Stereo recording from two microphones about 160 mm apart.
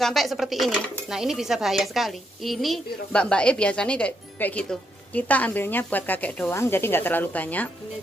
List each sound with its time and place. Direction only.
0.0 s speech: centre (ahead or behind)